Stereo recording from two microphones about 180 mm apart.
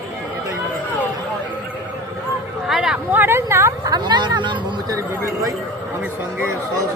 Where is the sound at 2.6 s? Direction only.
5° right (ahead or behind); by 5.0 s 25° right (ahead or behind).